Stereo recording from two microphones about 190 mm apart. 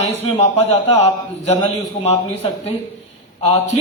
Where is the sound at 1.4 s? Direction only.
35° left (ahead or behind).